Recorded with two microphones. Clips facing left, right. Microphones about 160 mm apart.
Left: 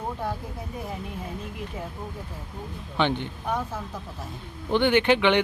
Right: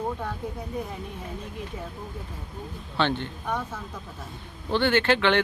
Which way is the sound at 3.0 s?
15° left (ahead or behind).